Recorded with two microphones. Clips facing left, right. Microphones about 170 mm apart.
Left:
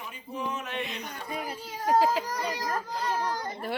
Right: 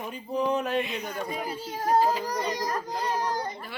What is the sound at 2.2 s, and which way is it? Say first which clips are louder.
Speech: right 3 dB; 15° right (ahead or behind).